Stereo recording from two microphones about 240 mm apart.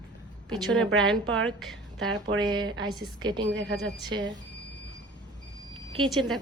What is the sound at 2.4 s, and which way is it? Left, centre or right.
A woman's voice, centre.